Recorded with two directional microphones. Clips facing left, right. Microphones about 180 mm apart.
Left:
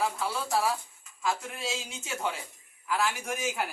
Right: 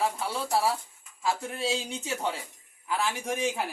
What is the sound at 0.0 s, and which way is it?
A man's voice, 30° right (ahead or behind).